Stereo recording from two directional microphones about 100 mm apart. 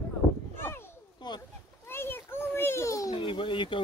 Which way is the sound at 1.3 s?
50° left (ahead or behind).